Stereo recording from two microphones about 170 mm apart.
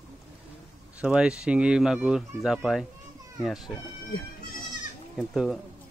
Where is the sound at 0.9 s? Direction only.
5° right (ahead or behind).